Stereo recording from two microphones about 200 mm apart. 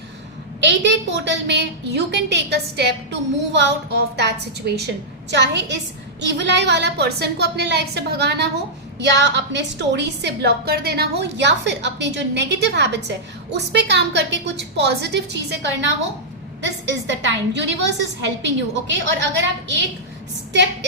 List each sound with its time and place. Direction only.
0.6 s a woman's voice: 60° right (ahead or behind)
17.1 s a woman's voice: 60° right (ahead or behind)